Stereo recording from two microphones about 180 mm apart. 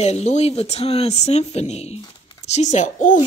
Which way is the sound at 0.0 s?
40° left (ahead or behind).